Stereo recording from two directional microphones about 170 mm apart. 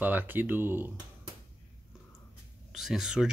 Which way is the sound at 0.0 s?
10° right (ahead or behind).